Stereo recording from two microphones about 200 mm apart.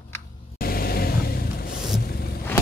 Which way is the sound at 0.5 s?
50° left (ahead or behind).